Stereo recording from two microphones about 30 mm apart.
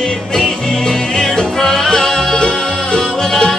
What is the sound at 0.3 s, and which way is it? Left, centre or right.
Music, left.